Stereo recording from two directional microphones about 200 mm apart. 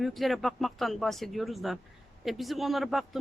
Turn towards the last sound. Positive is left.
turn(degrees=0)  # may be behind; listen again after turning